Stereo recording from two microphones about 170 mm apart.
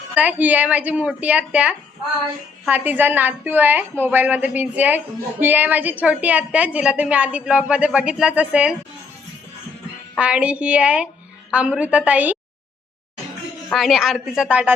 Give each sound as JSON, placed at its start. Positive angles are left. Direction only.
{"t": 0.1, "sound": "a woman's voice", "side_deg": -10}
{"t": 10.2, "sound": "a woman's voice", "side_deg": -5}
{"t": 13.7, "sound": "a woman's voice", "side_deg": 0}